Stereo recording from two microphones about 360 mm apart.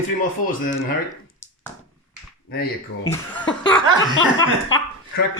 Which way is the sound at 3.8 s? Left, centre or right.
Centre.